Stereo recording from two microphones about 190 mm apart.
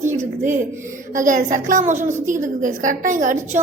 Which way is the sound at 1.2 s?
45° right (ahead or behind).